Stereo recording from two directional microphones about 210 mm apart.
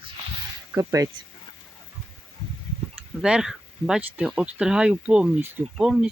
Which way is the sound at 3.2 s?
5° right (ahead or behind).